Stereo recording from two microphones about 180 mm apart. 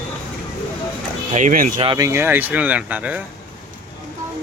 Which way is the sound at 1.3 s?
45° right (ahead or behind).